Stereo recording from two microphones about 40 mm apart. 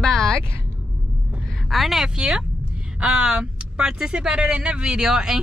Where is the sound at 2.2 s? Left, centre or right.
Centre.